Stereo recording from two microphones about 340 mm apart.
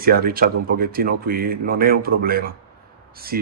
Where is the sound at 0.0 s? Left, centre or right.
Right.